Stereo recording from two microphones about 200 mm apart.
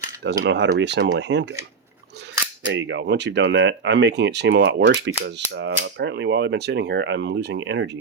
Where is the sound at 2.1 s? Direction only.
55° right (ahead or behind).